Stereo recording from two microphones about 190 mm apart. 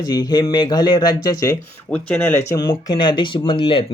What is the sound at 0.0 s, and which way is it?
Speech, 20° left (ahead or behind).